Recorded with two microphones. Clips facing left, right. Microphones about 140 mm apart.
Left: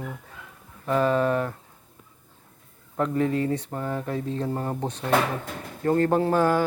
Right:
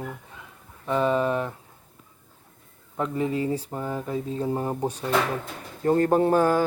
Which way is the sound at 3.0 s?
5° right (ahead or behind).